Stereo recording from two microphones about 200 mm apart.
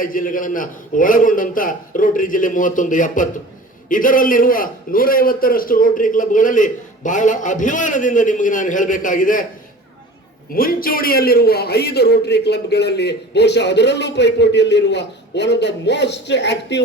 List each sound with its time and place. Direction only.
0.0 s a man's voice: 40° left (ahead or behind)
10.5 s a man's voice: 45° left (ahead or behind)